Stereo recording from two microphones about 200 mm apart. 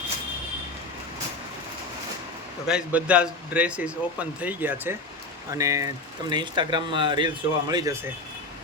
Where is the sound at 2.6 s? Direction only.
5° right (ahead or behind).